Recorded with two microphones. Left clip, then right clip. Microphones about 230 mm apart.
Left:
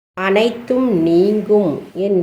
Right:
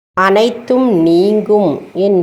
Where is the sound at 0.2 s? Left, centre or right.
Centre.